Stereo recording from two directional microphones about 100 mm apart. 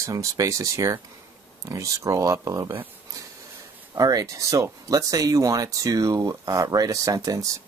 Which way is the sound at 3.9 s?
35° right (ahead or behind).